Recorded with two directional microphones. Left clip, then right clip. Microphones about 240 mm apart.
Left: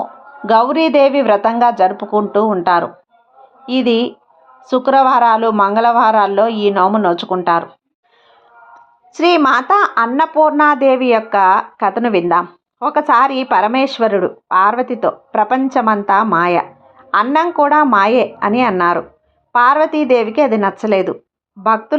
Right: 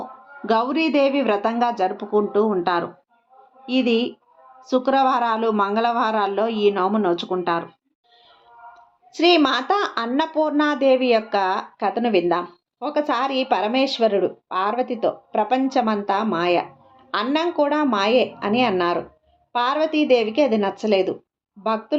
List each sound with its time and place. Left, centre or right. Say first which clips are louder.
0.0 s a woman's voice: left 9 dB; centre
8.7 s a woman's voice: left 5 dB; centre